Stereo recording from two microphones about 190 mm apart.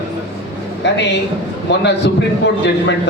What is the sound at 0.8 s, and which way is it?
A man's voice, 65° left (ahead or behind).